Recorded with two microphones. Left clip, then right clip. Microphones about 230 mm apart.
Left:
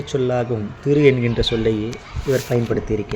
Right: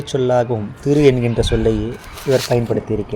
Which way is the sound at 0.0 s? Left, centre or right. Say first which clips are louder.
Right 4 dB; right.